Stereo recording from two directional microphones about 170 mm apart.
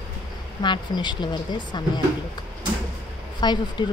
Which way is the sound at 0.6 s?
25° left (ahead or behind).